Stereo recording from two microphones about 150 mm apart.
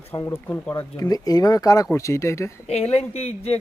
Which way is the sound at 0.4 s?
15° left (ahead or behind).